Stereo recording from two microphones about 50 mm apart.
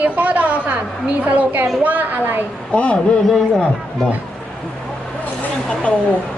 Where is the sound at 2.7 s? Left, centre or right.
Left.